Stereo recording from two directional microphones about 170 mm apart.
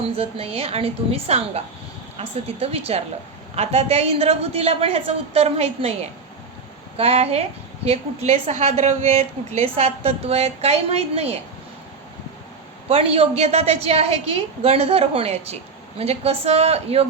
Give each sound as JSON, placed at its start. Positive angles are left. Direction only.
{"t": 0.2, "sound": "a woman's voice", "side_deg": -35}
{"t": 12.9, "sound": "a woman's voice", "side_deg": -35}